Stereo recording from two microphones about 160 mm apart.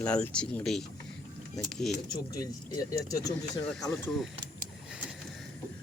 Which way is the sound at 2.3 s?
25° left (ahead or behind).